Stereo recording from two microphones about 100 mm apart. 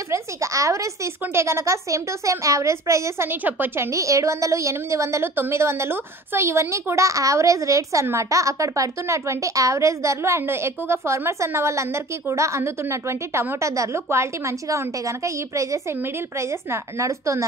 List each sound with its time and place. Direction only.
0.1 s a woman's voice: 30° right (ahead or behind)